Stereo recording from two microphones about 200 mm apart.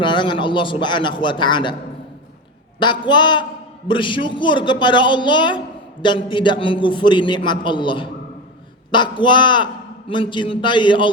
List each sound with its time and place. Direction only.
0.0 s a woman's voice: 25° left (ahead or behind)
2.7 s a woman's voice: 25° left (ahead or behind)